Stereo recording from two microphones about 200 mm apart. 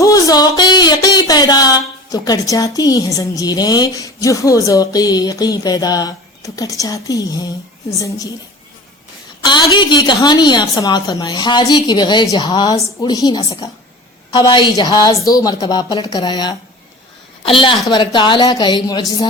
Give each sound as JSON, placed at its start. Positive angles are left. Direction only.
{"t": 0.0, "sound": "speech", "side_deg": 15}
{"t": 9.4, "sound": "a woman's voice", "side_deg": 20}